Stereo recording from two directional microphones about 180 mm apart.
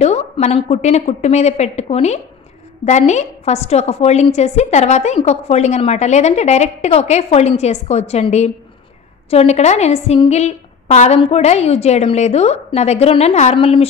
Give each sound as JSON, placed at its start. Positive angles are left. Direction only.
{"t": 0.0, "sound": "a woman's voice", "side_deg": 40}